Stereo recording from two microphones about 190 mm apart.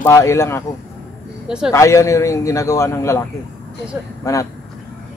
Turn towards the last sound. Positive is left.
turn(degrees=15)  # may be behind; listen again after turning